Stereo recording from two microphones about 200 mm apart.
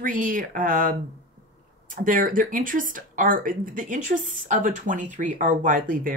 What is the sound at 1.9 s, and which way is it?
Speech, 40° right (ahead or behind).